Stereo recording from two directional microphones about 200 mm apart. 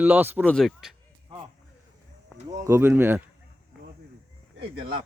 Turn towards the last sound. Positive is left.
turn(degrees=-25)  # may be behind; listen again after turning